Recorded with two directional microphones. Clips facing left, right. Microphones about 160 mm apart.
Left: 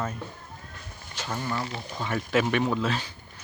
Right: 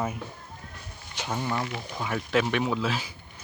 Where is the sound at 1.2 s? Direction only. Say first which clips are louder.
Right 2 dB; 10° right (ahead or behind).